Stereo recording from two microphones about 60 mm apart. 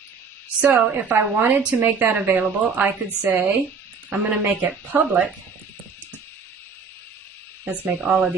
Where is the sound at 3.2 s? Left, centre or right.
Right.